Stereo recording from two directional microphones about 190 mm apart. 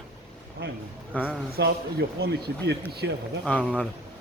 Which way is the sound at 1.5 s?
60° right (ahead or behind).